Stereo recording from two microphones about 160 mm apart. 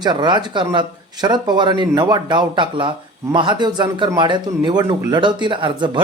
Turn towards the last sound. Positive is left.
turn(degrees=-30)  # may be behind; listen again after turning